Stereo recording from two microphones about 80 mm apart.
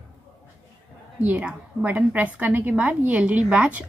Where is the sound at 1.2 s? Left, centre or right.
Centre.